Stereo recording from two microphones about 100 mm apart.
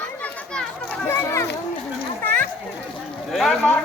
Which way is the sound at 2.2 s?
15° left (ahead or behind).